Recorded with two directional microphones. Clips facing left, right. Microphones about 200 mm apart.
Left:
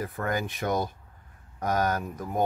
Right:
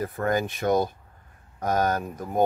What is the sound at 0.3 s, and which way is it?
Speech, 30° right (ahead or behind).